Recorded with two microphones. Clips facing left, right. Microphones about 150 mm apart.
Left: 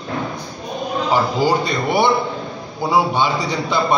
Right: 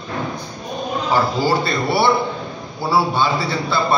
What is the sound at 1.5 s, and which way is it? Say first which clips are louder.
A man's voice: left 1 dB; 15° left (ahead or behind).